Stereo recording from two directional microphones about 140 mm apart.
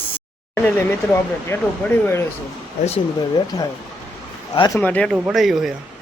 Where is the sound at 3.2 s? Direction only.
30° left (ahead or behind).